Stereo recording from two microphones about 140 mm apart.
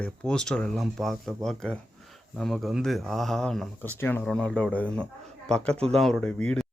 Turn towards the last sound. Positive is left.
turn(degrees=5)  # may be behind; listen again after turning